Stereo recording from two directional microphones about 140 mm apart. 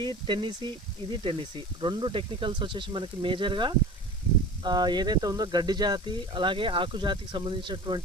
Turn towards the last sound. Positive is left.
turn(degrees=-35)  # may be behind; listen again after turning